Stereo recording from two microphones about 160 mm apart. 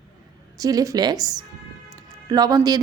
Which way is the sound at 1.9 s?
25° right (ahead or behind).